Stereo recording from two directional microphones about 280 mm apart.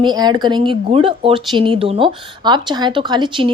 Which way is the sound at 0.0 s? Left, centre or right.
Centre.